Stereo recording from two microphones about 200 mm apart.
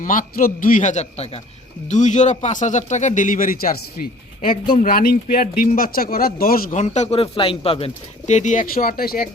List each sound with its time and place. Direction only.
0.0 s speech: 40° left (ahead or behind)